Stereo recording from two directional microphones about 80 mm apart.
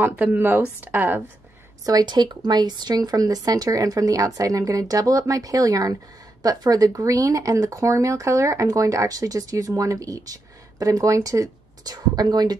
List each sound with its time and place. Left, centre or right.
0.0 s speech: right
1.9 s speech: right